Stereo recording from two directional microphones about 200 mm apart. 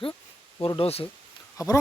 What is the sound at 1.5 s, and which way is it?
Speech, 15° left (ahead or behind).